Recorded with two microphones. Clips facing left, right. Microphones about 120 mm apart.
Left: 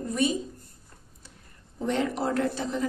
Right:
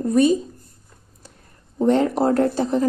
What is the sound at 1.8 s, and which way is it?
Speech, 40° right (ahead or behind).